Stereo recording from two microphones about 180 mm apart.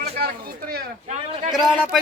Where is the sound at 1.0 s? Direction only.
40° right (ahead or behind).